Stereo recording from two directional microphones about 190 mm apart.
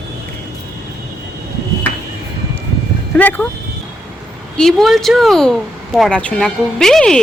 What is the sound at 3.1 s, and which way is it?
Speech, 10° left (ahead or behind).